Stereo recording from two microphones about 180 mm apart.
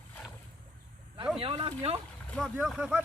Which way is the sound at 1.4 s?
30° right (ahead or behind).